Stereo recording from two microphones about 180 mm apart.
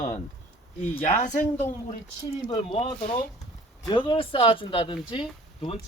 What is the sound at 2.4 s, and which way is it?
Speech, 30° left (ahead or behind).